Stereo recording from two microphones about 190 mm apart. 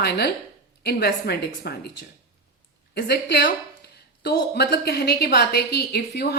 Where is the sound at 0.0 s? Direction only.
60° left (ahead or behind).